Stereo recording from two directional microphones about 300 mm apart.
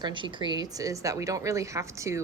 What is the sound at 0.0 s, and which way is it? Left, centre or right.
A woman's voice, centre.